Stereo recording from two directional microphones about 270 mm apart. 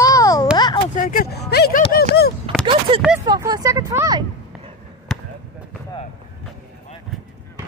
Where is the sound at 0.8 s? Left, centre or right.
Left.